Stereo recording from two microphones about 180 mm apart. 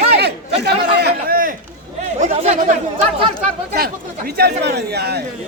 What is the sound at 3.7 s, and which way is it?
Speech, 60° right (ahead or behind).